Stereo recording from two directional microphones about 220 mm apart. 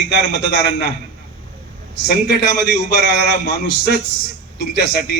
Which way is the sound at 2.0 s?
45° left (ahead or behind).